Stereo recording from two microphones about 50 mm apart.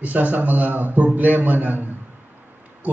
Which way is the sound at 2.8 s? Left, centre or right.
Right.